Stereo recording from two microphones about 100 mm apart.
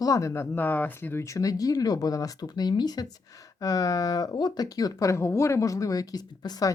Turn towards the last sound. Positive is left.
turn(degrees=40)  # may be behind; listen again after turning